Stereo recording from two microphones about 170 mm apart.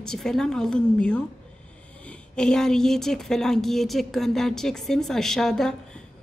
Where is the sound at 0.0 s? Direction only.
5° left (ahead or behind).